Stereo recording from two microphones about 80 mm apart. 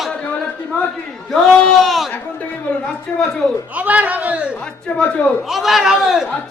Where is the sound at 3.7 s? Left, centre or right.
Centre.